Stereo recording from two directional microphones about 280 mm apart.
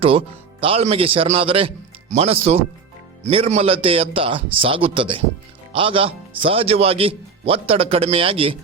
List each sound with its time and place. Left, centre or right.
0.0 s speech: centre